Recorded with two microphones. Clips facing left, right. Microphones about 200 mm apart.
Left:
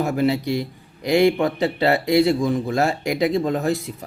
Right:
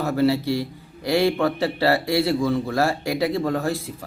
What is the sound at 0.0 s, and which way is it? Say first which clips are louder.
Speech: even; 15° left (ahead or behind).